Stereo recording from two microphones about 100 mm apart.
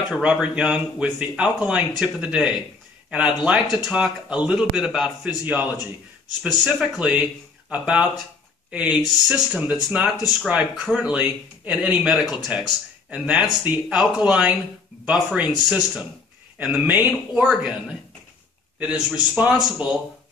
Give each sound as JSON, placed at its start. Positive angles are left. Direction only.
{"t": 0.1, "sound": "speech", "side_deg": -10}
{"t": 5.4, "sound": "speech", "side_deg": -15}
{"t": 6.5, "sound": "speech", "side_deg": 0}
{"t": 7.0, "sound": "speech", "side_deg": -15}
{"t": 17.5, "sound": "speech", "side_deg": -5}